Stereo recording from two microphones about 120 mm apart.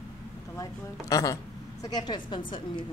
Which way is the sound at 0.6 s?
30° left (ahead or behind).